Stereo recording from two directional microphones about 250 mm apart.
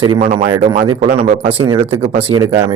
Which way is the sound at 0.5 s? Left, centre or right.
Right.